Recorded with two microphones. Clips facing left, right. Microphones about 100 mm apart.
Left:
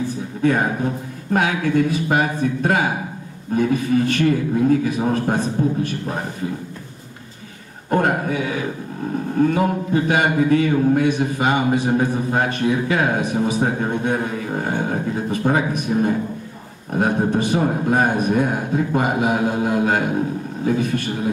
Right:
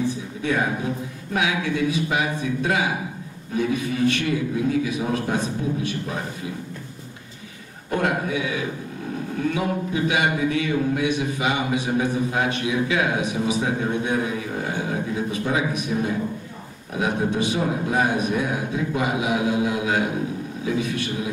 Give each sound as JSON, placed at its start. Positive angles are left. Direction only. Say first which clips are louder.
{"t": 0.4, "sound": "speech", "louder": "left 6 dB", "side_deg": 45}
{"t": 7.9, "sound": "speech", "louder": "left 4 dB", "side_deg": 45}